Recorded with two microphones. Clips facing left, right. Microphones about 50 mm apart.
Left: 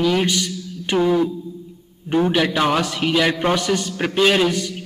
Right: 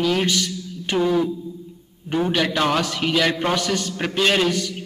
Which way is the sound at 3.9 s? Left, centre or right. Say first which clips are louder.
Left 3 dB; centre.